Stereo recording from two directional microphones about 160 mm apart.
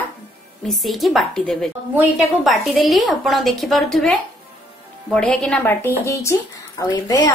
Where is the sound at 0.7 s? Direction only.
Centre (ahead or behind).